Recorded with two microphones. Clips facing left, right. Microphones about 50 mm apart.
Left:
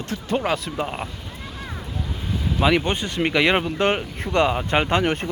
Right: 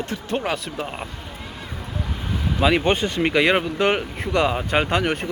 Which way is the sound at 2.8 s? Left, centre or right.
Right.